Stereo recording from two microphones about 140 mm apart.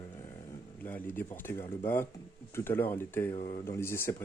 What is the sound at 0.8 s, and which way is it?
Speech, 15° left (ahead or behind).